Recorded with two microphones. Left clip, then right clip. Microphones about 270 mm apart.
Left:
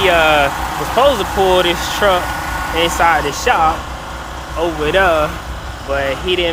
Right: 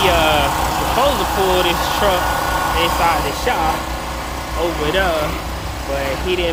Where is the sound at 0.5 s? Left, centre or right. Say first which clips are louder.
Right 2 dB; right.